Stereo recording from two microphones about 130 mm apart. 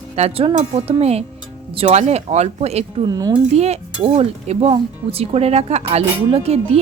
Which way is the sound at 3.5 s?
55° right (ahead or behind).